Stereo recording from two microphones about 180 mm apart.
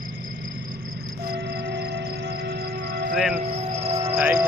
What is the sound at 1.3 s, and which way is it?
Music, 65° right (ahead or behind).